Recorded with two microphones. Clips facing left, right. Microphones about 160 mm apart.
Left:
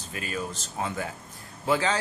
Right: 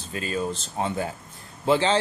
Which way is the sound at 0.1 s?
30° right (ahead or behind).